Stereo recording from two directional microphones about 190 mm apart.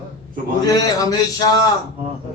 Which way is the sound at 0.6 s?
20° left (ahead or behind).